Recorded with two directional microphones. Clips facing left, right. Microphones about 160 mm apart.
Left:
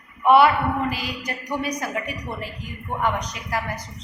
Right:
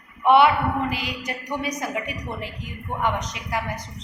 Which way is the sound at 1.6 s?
20° right (ahead or behind).